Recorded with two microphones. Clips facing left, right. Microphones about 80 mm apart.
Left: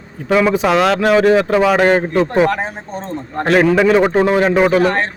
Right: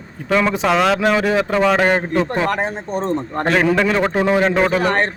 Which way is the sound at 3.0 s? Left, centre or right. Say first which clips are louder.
Right 6 dB; right.